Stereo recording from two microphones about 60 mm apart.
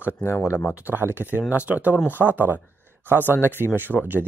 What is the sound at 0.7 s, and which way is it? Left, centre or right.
Speech, right.